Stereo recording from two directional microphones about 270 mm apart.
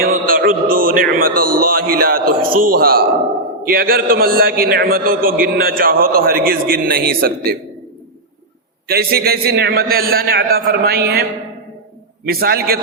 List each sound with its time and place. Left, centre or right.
0.0 s a man's voice: right
8.9 s a man's voice: right